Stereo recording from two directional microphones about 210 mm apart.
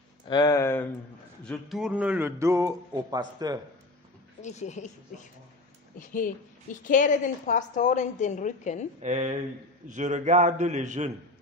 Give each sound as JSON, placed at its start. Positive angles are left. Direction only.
{"t": 0.3, "sound": "speech", "side_deg": 15}
{"t": 1.4, "sound": "a man's voice", "side_deg": 0}
{"t": 4.4, "sound": "a woman's voice", "side_deg": 35}
{"t": 9.0, "sound": "a man's voice", "side_deg": -35}